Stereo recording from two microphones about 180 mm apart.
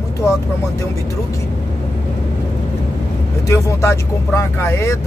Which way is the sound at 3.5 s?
15° left (ahead or behind).